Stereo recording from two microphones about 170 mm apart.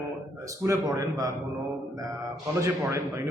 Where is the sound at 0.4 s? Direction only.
20° right (ahead or behind).